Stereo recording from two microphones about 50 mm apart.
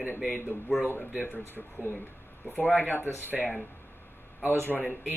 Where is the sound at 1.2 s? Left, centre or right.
Left.